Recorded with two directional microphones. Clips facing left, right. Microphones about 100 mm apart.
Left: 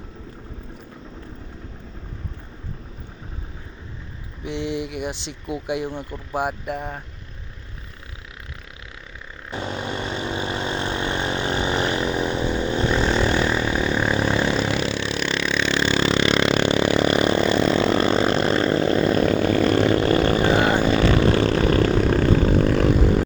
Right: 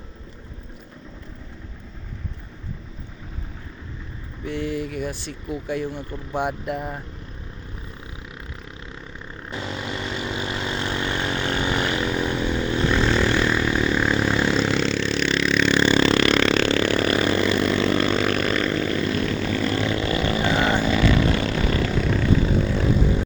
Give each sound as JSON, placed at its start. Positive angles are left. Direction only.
{"t": 4.4, "sound": "speech", "side_deg": 20}
{"t": 6.3, "sound": "speech", "side_deg": 5}
{"t": 9.6, "sound": "vehicle", "side_deg": 35}